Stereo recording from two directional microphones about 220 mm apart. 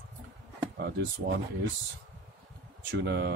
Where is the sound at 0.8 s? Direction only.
50° right (ahead or behind).